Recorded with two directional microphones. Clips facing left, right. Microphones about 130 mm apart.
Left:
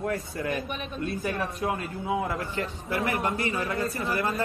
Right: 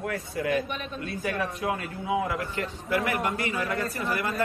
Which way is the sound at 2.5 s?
30° left (ahead or behind).